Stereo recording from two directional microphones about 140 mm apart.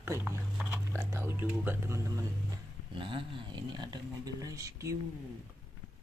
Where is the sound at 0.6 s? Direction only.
15° right (ahead or behind).